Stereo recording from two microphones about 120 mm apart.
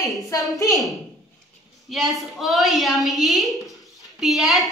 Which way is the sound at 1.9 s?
Centre (ahead or behind).